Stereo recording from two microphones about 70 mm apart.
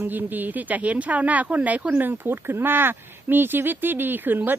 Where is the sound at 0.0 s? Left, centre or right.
Right.